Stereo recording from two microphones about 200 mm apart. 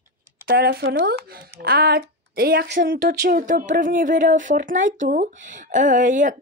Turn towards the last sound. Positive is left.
turn(degrees=-40)  # may be behind; listen again after turning